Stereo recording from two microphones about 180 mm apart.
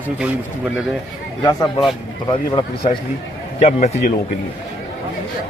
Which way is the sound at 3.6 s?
35° left (ahead or behind).